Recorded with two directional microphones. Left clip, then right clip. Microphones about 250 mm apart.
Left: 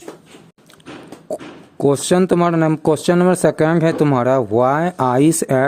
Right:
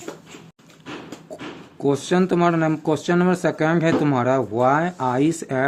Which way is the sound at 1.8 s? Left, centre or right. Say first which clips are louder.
Left 5 dB; left.